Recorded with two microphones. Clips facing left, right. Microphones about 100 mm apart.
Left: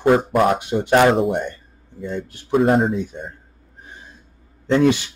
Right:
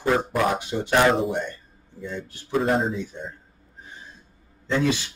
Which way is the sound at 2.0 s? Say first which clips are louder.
Left 6 dB; 55° left (ahead or behind).